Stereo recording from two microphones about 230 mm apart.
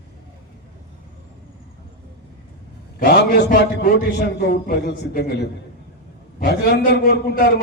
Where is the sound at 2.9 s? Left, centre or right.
Left.